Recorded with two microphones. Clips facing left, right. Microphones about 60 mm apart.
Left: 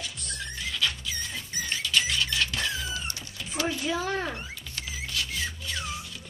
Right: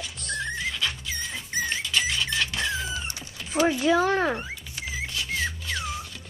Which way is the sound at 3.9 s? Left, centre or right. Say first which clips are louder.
Right 8 dB; right.